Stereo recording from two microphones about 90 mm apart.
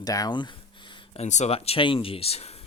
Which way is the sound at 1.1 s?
90° left.